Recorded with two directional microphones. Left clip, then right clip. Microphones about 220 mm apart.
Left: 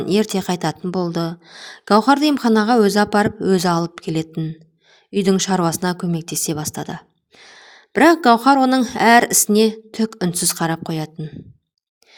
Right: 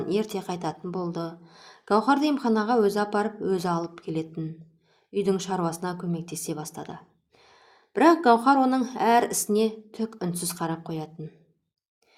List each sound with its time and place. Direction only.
0.0 s speech: 40° left (ahead or behind)